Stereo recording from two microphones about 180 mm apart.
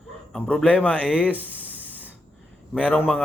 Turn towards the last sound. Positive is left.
turn(degrees=10)  # may be behind; listen again after turning